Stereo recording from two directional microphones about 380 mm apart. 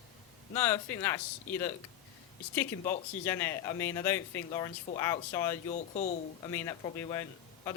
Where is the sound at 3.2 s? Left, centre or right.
Centre.